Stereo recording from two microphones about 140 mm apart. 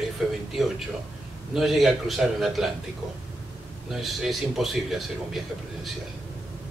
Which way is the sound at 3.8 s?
Centre (ahead or behind).